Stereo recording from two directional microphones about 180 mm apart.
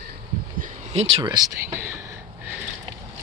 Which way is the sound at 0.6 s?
35° right (ahead or behind).